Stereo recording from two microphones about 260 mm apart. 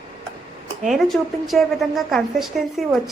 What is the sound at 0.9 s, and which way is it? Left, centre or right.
A woman's voice, centre.